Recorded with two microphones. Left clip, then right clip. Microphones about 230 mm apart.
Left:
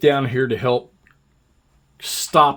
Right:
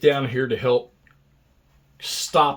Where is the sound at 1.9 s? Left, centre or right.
Left.